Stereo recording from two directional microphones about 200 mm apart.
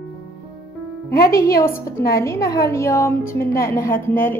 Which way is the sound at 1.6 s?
10° left (ahead or behind).